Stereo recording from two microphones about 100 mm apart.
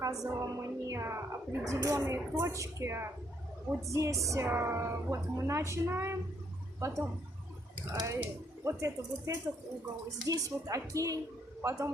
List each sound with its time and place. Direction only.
0.0 s a woman's voice: 35° right (ahead or behind)
8.0 s a woman's voice: 30° right (ahead or behind)